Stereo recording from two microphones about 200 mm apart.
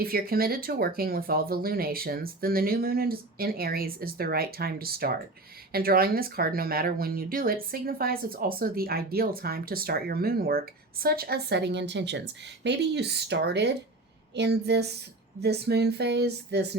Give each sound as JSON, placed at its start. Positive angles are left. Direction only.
{"t": 0.0, "sound": "speech", "side_deg": -50}